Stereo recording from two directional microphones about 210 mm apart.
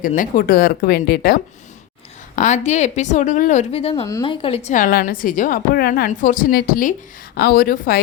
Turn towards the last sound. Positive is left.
turn(degrees=45)  # may be behind; listen again after turning